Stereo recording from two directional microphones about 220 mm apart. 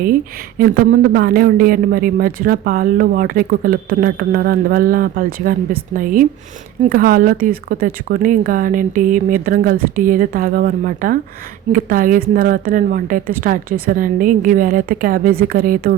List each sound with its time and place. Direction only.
1.1 s speech: 40° right (ahead or behind)